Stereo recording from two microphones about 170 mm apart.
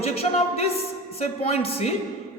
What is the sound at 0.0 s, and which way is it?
A man's voice, 35° left (ahead or behind).